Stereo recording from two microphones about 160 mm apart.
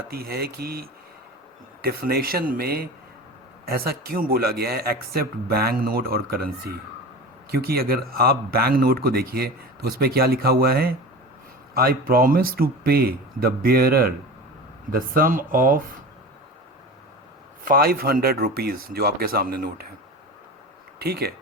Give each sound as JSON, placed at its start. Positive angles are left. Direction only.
{"t": 0.1, "sound": "speech", "side_deg": -75}
{"t": 17.7, "sound": "speech", "side_deg": -70}
{"t": 21.0, "sound": "speech", "side_deg": -80}